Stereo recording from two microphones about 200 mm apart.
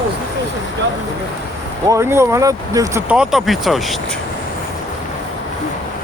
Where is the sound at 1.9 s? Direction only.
15° right (ahead or behind).